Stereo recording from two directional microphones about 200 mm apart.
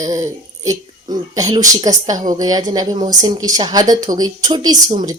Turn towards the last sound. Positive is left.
turn(degrees=-20)  # may be behind; listen again after turning